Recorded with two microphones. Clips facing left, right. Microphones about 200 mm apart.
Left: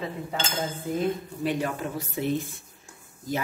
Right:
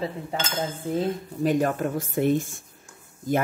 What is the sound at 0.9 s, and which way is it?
Speech, 45° right (ahead or behind).